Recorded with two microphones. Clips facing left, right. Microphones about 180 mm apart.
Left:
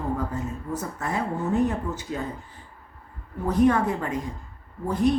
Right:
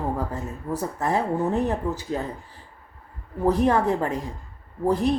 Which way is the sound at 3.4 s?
35° right (ahead or behind).